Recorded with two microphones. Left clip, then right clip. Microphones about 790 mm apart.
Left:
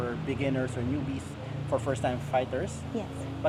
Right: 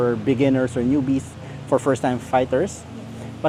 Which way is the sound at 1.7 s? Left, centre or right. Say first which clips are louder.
Right 10 dB; right.